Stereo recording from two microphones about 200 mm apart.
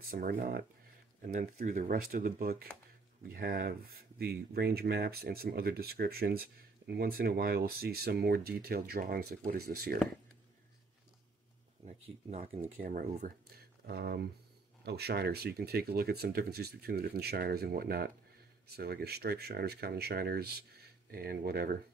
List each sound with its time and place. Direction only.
0.1 s speech: 45° right (ahead or behind)
11.8 s speech: 35° right (ahead or behind)
13.8 s speech: 55° right (ahead or behind)